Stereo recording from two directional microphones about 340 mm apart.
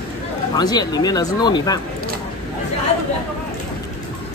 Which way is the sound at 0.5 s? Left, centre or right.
Centre.